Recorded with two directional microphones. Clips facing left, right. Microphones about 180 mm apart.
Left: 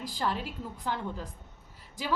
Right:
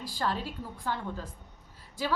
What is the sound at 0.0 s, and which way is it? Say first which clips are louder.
A woman's voice: even; 15° left (ahead or behind).